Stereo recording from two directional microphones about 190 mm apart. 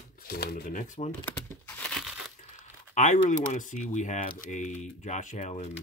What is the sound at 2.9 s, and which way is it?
Speech, 40° left (ahead or behind).